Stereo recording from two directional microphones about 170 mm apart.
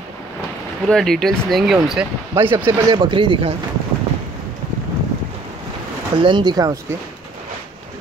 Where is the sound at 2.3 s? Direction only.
15° right (ahead or behind); by 3.5 s 30° right (ahead or behind).